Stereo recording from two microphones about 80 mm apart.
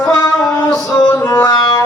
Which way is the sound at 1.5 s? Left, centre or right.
Left.